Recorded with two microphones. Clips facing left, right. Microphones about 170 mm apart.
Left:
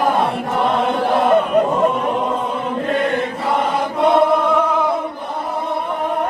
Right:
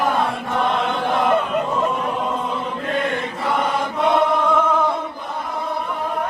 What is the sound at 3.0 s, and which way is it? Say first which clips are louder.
Chant: left 4 dB; 25° left (ahead or behind).